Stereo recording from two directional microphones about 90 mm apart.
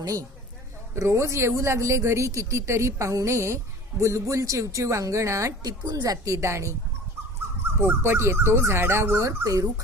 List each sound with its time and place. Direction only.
0.0 s speech: 40° right (ahead or behind)
0.9 s speech: 30° right (ahead or behind)
7.8 s speech: 25° right (ahead or behind)